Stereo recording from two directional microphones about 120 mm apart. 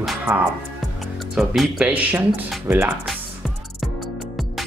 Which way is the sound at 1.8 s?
10° right (ahead or behind).